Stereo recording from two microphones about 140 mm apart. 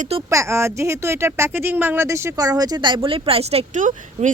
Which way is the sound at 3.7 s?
60° right (ahead or behind).